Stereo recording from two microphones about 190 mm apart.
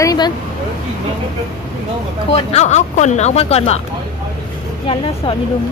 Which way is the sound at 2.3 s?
35° left (ahead or behind).